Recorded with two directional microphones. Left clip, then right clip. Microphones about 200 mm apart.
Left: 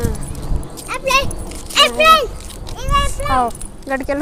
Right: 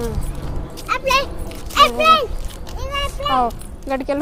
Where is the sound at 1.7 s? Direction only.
Centre (ahead or behind).